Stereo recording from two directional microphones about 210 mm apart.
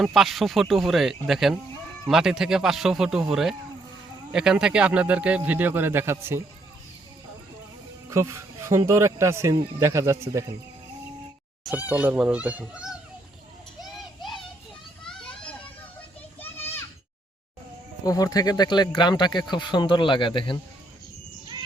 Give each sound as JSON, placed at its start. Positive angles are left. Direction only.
{"t": 0.0, "sound": "a man's voice", "side_deg": 0}
{"t": 8.1, "sound": "speech", "side_deg": -15}
{"t": 11.9, "sound": "a man's voice", "side_deg": -5}
{"t": 14.2, "sound": "child singing", "side_deg": 0}
{"t": 15.0, "sound": "children playing", "side_deg": 5}
{"t": 18.0, "sound": "speech", "side_deg": 15}